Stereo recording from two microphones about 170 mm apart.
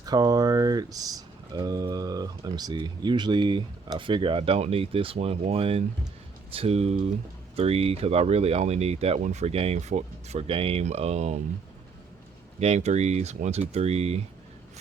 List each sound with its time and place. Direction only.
0.0 s speech: 20° right (ahead or behind); by 11.3 s 40° right (ahead or behind)
12.5 s speech: 40° right (ahead or behind)